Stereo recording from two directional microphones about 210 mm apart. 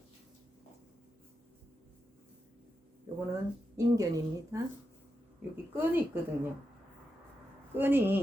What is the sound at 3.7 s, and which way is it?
Speech, 15° right (ahead or behind).